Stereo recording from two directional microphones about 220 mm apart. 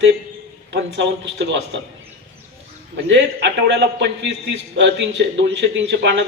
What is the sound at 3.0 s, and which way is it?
A man's voice, 55° right (ahead or behind).